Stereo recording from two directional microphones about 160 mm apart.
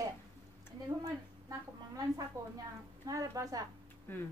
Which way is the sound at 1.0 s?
20° right (ahead or behind).